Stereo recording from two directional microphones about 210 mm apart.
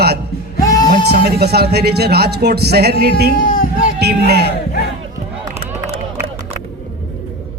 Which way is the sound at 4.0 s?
50° right (ahead or behind).